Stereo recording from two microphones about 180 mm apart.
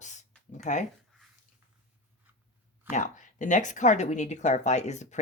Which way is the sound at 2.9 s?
45° left (ahead or behind).